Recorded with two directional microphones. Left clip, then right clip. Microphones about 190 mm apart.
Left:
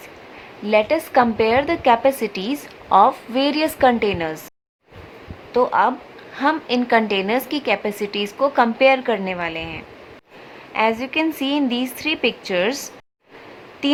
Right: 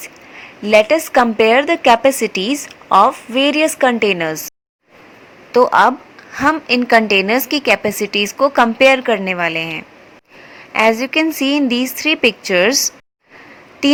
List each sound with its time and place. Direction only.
0.7 s speech: 20° right (ahead or behind)
5.5 s speech: 30° right (ahead or behind)